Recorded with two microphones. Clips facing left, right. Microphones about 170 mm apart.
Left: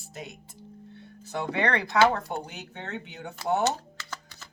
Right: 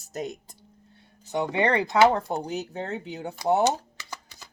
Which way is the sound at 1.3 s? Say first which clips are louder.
Right 4 dB; 20° right (ahead or behind).